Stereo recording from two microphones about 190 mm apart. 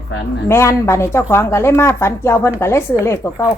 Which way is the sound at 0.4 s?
15° left (ahead or behind).